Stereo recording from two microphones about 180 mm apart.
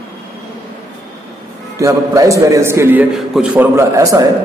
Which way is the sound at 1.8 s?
20° right (ahead or behind).